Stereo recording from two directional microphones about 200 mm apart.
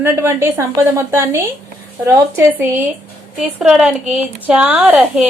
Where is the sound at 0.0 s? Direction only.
10° right (ahead or behind).